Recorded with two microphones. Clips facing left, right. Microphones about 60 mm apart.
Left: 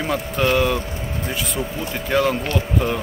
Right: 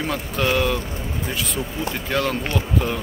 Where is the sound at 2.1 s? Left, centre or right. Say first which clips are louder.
Left 5 dB; centre.